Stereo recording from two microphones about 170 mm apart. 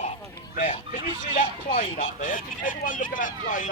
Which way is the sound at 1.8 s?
50° left (ahead or behind).